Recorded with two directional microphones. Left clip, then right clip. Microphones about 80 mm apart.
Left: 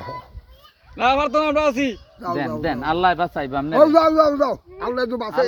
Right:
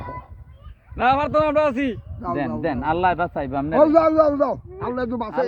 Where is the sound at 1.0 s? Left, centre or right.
Right.